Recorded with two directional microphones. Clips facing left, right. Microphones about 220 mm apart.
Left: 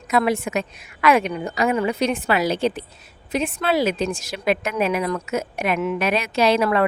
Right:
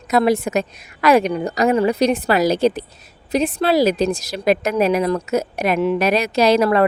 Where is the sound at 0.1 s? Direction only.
40° right (ahead or behind).